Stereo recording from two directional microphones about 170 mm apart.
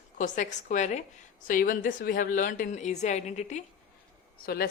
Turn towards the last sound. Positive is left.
turn(degrees=65)  # may be behind; listen again after turning